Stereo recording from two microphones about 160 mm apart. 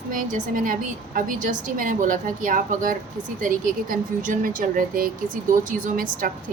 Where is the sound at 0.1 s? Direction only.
55° right (ahead or behind).